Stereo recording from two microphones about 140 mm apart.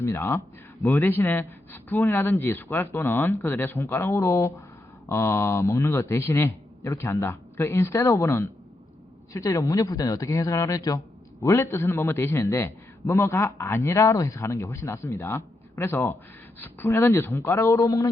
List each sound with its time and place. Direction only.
0.0 s a man's voice: 20° left (ahead or behind)